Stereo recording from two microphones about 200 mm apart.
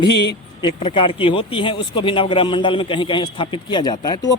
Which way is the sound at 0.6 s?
25° left (ahead or behind).